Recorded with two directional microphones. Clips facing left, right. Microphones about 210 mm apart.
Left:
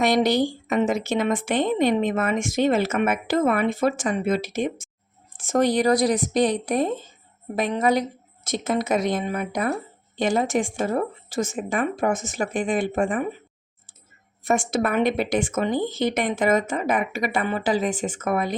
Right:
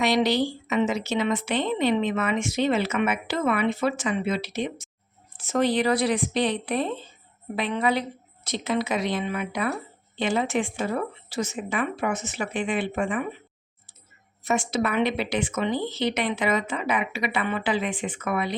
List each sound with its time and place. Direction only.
0.0 s speech: 50° left (ahead or behind)
14.4 s speech: 50° left (ahead or behind)